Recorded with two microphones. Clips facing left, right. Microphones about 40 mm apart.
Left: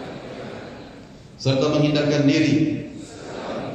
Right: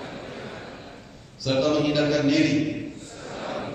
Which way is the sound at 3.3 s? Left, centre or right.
Centre.